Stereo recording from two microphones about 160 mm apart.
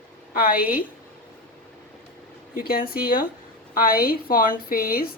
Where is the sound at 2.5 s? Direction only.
65° left (ahead or behind).